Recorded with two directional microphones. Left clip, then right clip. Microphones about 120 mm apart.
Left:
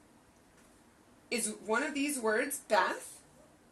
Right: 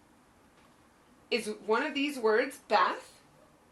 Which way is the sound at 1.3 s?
25° left (ahead or behind).